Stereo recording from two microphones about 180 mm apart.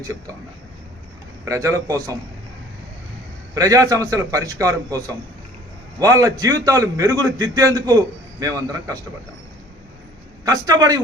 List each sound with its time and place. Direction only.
0.0 s a man's voice: 20° right (ahead or behind)
1.5 s a man's voice: 15° right (ahead or behind)
3.5 s a man's voice: 20° right (ahead or behind)
10.4 s a man's voice: 20° right (ahead or behind)